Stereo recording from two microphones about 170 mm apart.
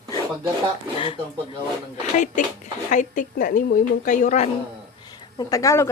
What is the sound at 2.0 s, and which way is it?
Speech, 45° left (ahead or behind).